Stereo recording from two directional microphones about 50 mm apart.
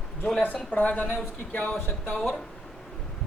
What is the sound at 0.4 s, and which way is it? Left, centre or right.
Speech, left.